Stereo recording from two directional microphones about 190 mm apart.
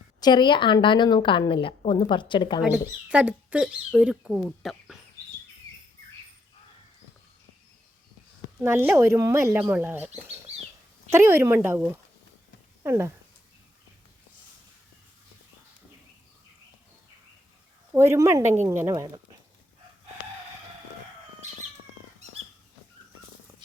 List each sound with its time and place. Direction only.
0.2 s a woman's voice: 25° left (ahead or behind)
2.7 s speech: 5° right (ahead or behind)
8.6 s speech: 10° right (ahead or behind)
11.1 s speech: 15° right (ahead or behind)
17.9 s speech: 15° right (ahead or behind)